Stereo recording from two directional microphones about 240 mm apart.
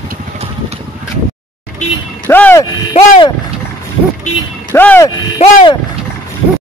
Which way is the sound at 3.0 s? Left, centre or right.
Centre.